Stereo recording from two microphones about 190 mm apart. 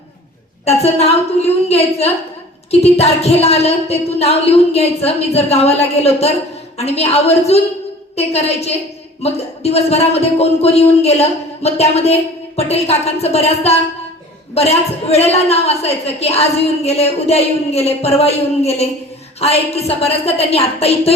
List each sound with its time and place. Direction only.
0.6 s speech: 35° left (ahead or behind)